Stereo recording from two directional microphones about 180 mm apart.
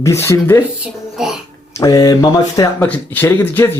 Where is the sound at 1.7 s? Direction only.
20° left (ahead or behind).